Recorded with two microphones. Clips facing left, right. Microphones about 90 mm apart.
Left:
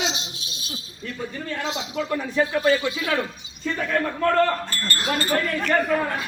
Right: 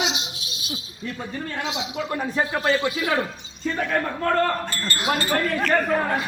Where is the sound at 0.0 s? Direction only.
35° left (ahead or behind).